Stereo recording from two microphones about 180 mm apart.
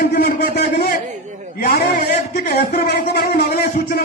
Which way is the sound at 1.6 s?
55° left (ahead or behind).